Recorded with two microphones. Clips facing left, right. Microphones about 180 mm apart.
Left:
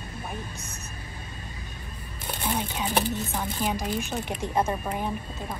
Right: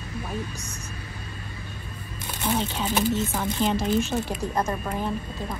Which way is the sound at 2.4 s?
10° left (ahead or behind).